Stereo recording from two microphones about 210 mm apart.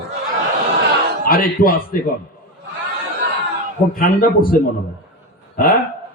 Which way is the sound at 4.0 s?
45° left (ahead or behind).